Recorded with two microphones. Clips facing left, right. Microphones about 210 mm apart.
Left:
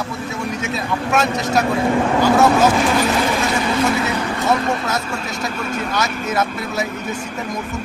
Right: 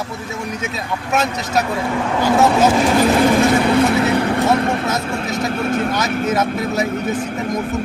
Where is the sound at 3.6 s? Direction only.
60° right (ahead or behind).